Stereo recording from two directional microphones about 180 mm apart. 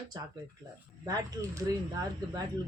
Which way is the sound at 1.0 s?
15° right (ahead or behind).